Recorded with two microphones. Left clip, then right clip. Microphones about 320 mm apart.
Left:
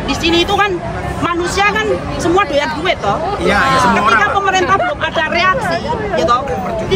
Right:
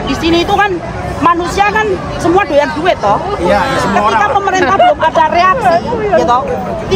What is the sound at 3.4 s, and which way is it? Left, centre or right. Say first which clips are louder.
Speech: left 1 dB; centre.